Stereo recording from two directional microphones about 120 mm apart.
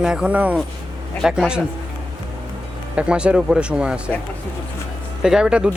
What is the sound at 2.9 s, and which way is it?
Speech, 10° right (ahead or behind).